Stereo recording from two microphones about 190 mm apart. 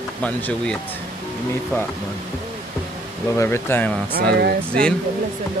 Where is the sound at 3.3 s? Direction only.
10° left (ahead or behind).